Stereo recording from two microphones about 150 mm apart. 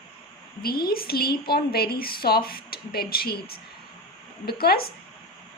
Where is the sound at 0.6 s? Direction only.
90° left.